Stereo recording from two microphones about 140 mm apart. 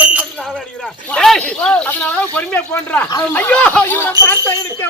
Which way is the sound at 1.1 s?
5° left (ahead or behind).